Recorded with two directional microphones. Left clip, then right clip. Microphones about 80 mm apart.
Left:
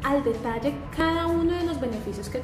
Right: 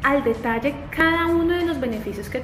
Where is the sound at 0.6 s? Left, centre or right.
Left.